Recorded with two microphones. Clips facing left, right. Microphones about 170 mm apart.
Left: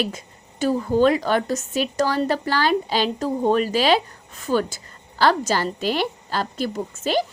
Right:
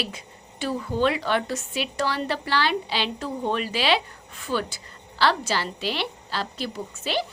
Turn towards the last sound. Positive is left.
turn(degrees=45)  # may be behind; listen again after turning